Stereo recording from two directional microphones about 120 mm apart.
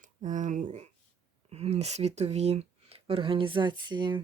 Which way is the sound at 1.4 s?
60° right (ahead or behind).